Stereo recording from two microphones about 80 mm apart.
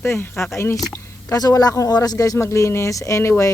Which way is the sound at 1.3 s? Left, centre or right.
Left.